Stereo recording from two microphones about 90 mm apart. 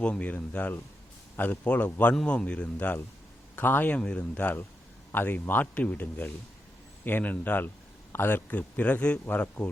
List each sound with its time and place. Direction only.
0.0 s a man's voice: 15° left (ahead or behind)